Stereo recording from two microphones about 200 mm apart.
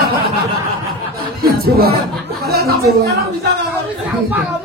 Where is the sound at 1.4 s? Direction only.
50° right (ahead or behind).